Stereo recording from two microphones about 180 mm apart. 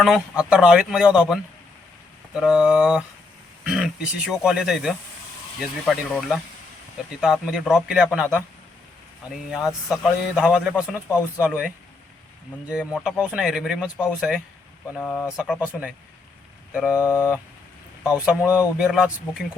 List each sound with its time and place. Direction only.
0.0 s a man's voice: 5° right (ahead or behind)
12.9 s a man's voice: 5° right (ahead or behind)
15.4 s a man's voice: 5° right (ahead or behind)
16.8 s speech: 15° left (ahead or behind)
18.1 s a man's voice: 10° right (ahead or behind)